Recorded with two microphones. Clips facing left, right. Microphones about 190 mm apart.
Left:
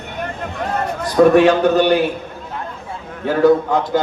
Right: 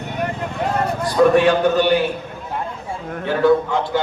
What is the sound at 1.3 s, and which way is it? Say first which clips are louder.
Speech: left 3 dB; 45° left (ahead or behind).